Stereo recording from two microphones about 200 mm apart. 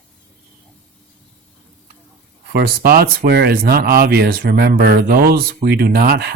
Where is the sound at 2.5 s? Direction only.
50° right (ahead or behind).